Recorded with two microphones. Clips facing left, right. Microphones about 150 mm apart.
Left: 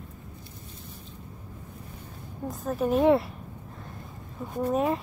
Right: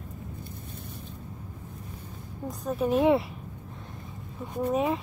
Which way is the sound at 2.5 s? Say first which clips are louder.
Even; centre (ahead or behind).